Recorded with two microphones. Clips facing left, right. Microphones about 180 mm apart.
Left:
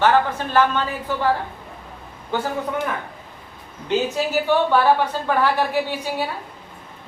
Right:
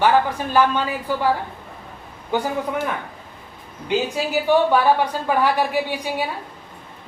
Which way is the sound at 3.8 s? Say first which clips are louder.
Left 1 dB; 10° right (ahead or behind).